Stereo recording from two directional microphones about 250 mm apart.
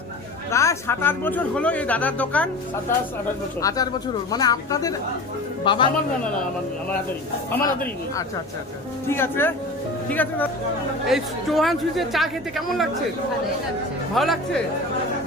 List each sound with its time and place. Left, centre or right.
0.5 s speech: centre
3.6 s a man's voice: centre
9.0 s speech: centre
14.2 s speech: centre